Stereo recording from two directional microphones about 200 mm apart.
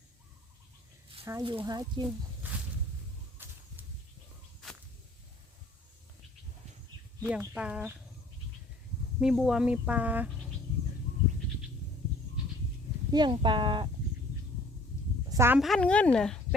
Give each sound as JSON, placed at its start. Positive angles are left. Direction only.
{"t": 1.2, "sound": "speech", "side_deg": -15}
{"t": 3.4, "sound": "whip", "side_deg": -10}
{"t": 7.3, "sound": "speech", "side_deg": -5}
{"t": 9.2, "sound": "speech", "side_deg": 0}
{"t": 13.1, "sound": "speech", "side_deg": -20}
{"t": 15.3, "sound": "speech", "side_deg": -10}
{"t": 15.6, "sound": "speech", "side_deg": 5}